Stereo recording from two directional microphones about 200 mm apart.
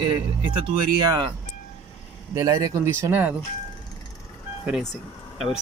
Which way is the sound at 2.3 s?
15° right (ahead or behind).